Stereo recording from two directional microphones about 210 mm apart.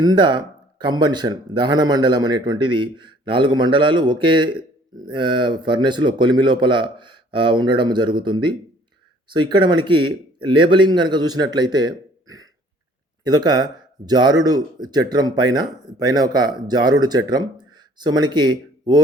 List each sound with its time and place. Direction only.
0.0 s speech: 20° right (ahead or behind)